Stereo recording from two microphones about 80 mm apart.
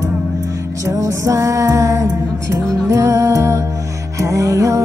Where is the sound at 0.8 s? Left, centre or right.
Right.